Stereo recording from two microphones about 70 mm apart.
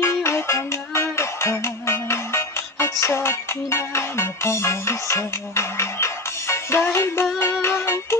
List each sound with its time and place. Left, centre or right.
0.0 s music: left